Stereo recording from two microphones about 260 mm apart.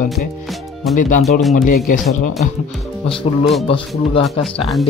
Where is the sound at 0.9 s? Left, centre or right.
Centre.